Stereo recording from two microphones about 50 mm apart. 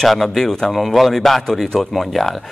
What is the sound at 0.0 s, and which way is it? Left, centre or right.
Speech, centre.